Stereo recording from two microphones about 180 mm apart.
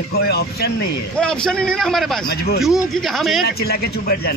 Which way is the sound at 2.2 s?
60° left (ahead or behind).